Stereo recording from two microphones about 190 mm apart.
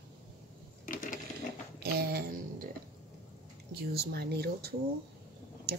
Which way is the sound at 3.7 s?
55° right (ahead or behind).